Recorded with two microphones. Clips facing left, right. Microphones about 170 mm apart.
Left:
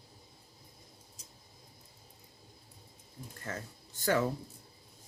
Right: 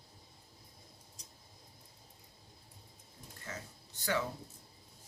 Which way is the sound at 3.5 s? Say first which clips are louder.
Left 5 dB; 50° left (ahead or behind).